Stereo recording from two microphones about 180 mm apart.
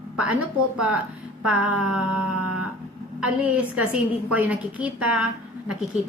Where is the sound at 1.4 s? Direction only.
5° right (ahead or behind).